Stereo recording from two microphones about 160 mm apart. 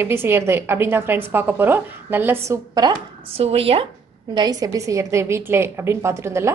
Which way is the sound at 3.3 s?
40° right (ahead or behind).